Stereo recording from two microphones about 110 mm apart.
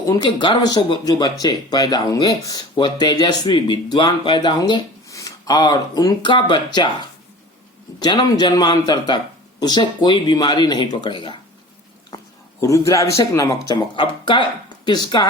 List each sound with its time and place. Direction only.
0.0 s speech: 40° left (ahead or behind)
5.0 s speech: 30° left (ahead or behind)
8.0 s speech: 40° left (ahead or behind)
12.1 s a sound: 35° left (ahead or behind)
12.5 s speech: 30° left (ahead or behind)
13.9 s speech: 50° left (ahead or behind)